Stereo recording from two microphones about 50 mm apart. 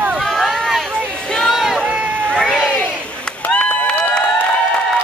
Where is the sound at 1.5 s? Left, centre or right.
Centre.